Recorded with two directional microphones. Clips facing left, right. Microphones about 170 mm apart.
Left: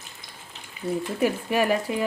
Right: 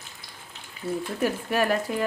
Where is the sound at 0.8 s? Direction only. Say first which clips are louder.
Left 2 dB; 20° left (ahead or behind).